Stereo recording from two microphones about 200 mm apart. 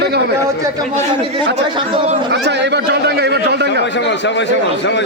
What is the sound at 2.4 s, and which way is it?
Speech, 60° right (ahead or behind).